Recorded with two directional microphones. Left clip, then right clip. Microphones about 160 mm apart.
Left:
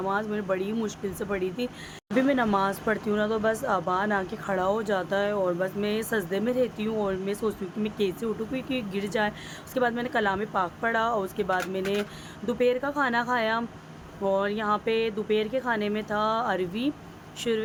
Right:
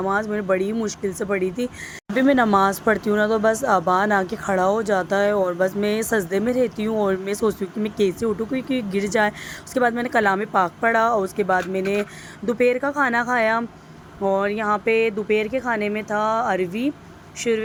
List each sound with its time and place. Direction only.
0.0 s speech: 35° right (ahead or behind)
2.1 s speech: 45° right (ahead or behind); by 17.5 s 20° right (ahead or behind)